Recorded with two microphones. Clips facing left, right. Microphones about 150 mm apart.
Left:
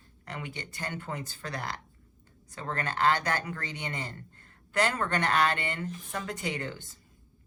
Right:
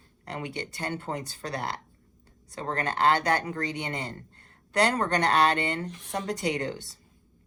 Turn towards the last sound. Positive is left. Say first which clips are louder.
# right 5 dB
turn(degrees=-40)  # may be behind; listen again after turning